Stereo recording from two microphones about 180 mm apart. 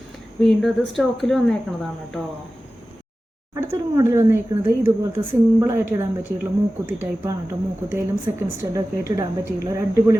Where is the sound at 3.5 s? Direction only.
15° right (ahead or behind).